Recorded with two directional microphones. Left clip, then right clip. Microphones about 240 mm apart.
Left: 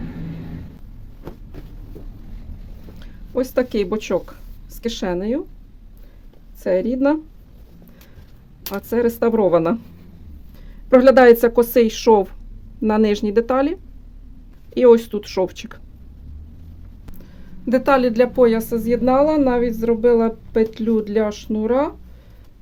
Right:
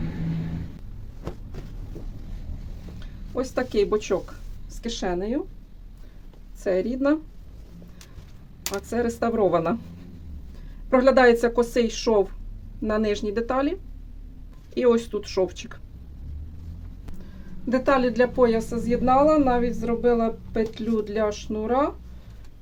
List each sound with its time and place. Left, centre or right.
3.0 s speech: left
6.6 s speech: left
8.9 s speech: left
10.8 s speech: left
14.8 s speech: left
17.7 s speech: left